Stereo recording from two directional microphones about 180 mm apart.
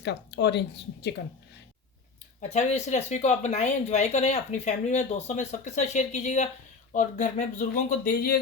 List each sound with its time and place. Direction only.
0.0 s speech: 70° left (ahead or behind)
2.4 s speech: 40° left (ahead or behind)